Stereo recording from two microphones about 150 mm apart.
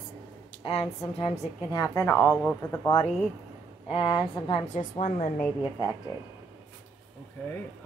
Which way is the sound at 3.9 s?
35° left (ahead or behind).